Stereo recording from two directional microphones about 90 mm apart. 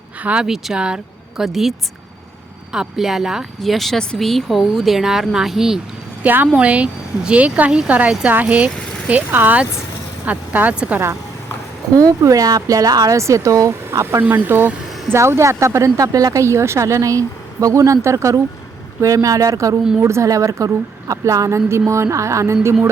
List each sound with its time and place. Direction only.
0.2 s speech: 15° right (ahead or behind)
2.7 s speech: 5° right (ahead or behind)
6.2 s a woman's voice: 20° right (ahead or behind)
11.9 s speech: 40° right (ahead or behind)
13.1 s speech: 35° right (ahead or behind)
14.8 s vehicle: centre (ahead or behind)
15.1 s speech: 30° right (ahead or behind)